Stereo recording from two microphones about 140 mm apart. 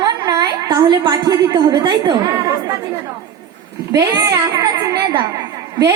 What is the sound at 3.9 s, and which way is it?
Music, 25° right (ahead or behind).